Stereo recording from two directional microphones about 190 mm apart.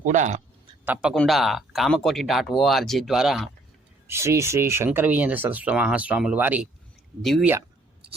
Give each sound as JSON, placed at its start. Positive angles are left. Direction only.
{"t": 0.0, "sound": "speech", "side_deg": -40}
{"t": 1.1, "sound": "speech", "side_deg": 0}
{"t": 4.0, "sound": "speech", "side_deg": -15}